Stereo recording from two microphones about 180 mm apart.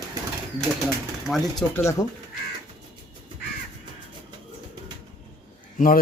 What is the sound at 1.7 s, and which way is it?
Speech, 15° left (ahead or behind).